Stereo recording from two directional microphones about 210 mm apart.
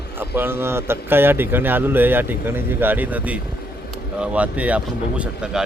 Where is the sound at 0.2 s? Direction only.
10° right (ahead or behind).